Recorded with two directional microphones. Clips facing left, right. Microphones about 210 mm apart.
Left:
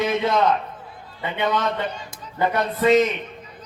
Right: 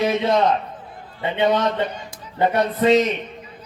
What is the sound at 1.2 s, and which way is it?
A man's voice, 30° right (ahead or behind).